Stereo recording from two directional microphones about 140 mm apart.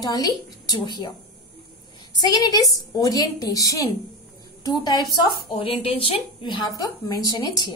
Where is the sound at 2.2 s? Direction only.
30° left (ahead or behind).